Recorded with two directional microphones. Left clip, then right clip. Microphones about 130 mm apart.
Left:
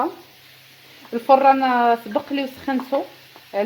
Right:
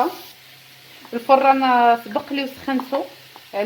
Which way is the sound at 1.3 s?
60° left (ahead or behind).